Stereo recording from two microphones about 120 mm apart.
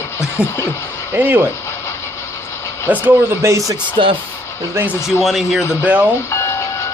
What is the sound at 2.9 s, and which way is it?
Speech, 15° right (ahead or behind).